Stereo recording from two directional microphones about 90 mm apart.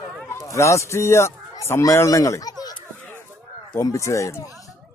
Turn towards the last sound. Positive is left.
turn(degrees=35)  # may be behind; listen again after turning